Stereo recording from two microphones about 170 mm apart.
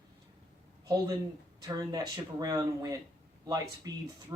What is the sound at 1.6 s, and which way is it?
Speech, 25° right (ahead or behind).